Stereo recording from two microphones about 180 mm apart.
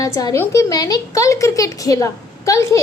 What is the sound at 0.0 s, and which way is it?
A woman's voice, 20° left (ahead or behind).